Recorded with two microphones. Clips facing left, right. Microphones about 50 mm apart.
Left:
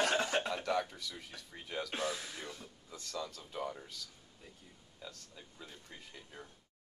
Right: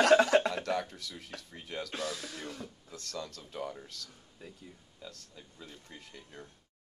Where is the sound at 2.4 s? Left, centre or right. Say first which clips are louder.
Right 5 dB; right.